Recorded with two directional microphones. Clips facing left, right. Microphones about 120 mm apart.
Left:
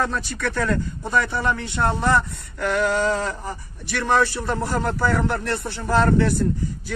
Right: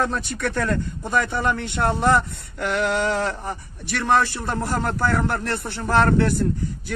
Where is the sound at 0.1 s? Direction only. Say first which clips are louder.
Right 1 dB; 50° right (ahead or behind).